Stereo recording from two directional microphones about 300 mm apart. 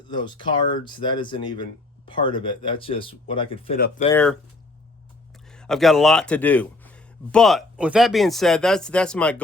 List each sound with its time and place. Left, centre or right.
0.1 s speech: centre
4.1 s speech: centre
5.5 s speech: centre